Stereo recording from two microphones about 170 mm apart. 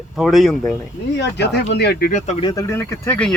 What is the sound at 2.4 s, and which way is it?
Speech, 25° left (ahead or behind).